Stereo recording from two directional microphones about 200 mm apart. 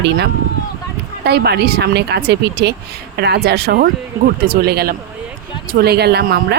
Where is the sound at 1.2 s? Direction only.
55° right (ahead or behind).